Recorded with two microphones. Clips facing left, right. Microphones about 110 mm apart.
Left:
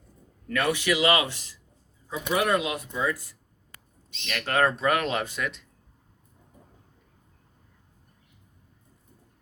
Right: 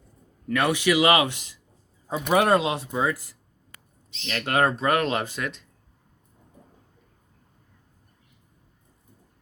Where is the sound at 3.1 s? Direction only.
90° right.